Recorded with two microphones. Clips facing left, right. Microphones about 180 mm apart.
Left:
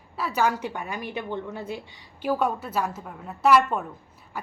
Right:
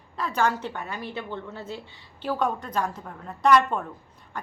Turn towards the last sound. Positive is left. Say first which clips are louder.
# left 1 dB
turn(degrees=5)  # may be behind; listen again after turning